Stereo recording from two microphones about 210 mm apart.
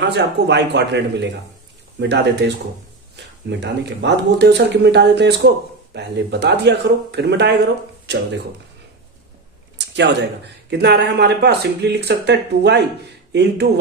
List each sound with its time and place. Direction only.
0.0 s speech: 55° right (ahead or behind)
9.8 s a sound: 55° right (ahead or behind)
10.7 s speech: 55° right (ahead or behind)